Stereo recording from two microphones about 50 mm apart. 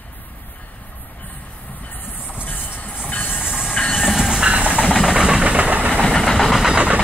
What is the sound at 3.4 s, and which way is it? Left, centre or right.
Train, centre.